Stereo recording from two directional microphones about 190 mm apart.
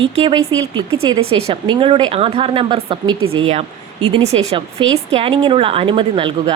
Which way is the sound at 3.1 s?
90° right.